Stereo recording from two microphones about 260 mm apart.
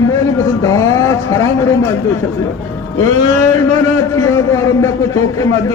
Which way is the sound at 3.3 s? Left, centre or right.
Right.